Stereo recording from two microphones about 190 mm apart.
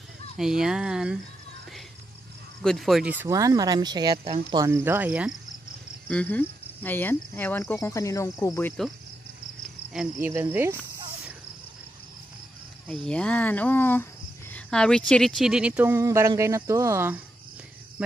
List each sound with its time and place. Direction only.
0.4 s speech: 5° right (ahead or behind)
2.6 s speech: centre (ahead or behind); by 4.2 s 20° right (ahead or behind)
4.2 s speech: 35° right (ahead or behind)
4.6 s speech: 15° right (ahead or behind)
6.0 s speech: 5° left (ahead or behind)
9.8 s speech: 10° right (ahead or behind)
12.8 s speech: 5° left (ahead or behind); by 17.2 s 10° right (ahead or behind)